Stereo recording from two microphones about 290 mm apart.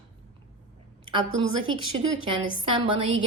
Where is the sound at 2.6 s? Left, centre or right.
Centre.